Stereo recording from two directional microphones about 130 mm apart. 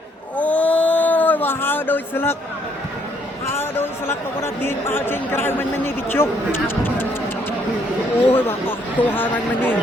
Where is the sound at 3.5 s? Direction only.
15° left (ahead or behind).